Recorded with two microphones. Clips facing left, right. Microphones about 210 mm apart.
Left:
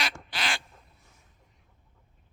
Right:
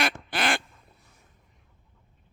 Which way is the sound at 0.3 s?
55° right (ahead or behind).